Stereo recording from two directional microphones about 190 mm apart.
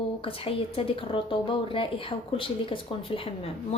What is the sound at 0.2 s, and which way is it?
Speech, 30° left (ahead or behind).